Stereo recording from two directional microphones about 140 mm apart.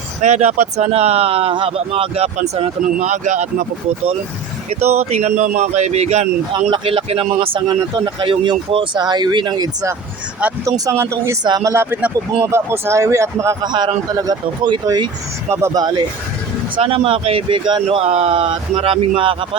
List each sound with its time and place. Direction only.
0.2 s speech: 55° right (ahead or behind)
6.5 s speech: 35° right (ahead or behind)
10.7 s a man's voice: 20° right (ahead or behind)
11.4 s speech: 30° right (ahead or behind)
11.7 s a man's voice: 15° right (ahead or behind); by 15.1 s 30° right (ahead or behind)
15.4 s a man's voice: 20° right (ahead or behind)
16.7 s speech: 40° right (ahead or behind)